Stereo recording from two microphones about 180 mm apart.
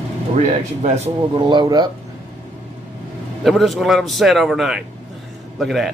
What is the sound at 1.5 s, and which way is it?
Speech, 25° right (ahead or behind).